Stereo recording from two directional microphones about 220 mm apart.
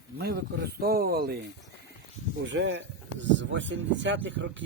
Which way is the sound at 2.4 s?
55° right (ahead or behind).